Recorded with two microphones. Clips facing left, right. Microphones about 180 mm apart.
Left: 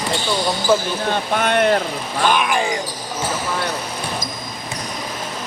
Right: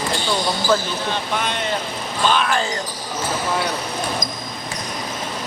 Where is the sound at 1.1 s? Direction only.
55° left (ahead or behind).